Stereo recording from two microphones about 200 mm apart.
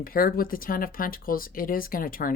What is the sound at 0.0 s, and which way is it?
Speech, 45° left (ahead or behind).